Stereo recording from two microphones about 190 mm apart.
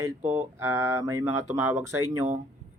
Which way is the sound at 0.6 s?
15° right (ahead or behind).